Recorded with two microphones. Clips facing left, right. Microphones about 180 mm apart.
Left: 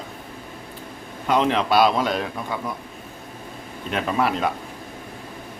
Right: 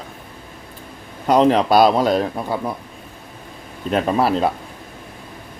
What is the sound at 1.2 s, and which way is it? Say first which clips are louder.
A man's voice: right 6 dB; 40° right (ahead or behind).